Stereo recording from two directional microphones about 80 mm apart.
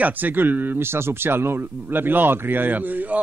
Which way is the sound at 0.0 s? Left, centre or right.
Right.